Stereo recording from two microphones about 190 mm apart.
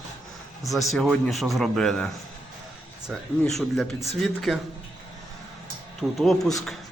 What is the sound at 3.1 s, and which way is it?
Speech, centre (ahead or behind).